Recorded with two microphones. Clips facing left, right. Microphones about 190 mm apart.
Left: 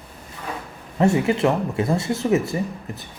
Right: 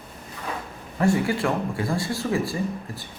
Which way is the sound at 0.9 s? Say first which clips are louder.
Left 3 dB; 20° left (ahead or behind).